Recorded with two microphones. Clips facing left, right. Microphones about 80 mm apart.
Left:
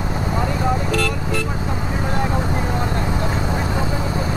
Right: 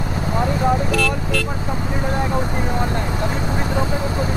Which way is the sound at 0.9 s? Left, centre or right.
Left.